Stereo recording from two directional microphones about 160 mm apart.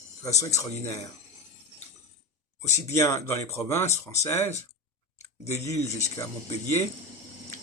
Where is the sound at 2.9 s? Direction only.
15° left (ahead or behind).